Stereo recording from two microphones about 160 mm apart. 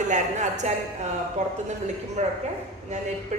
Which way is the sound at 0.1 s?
45° right (ahead or behind).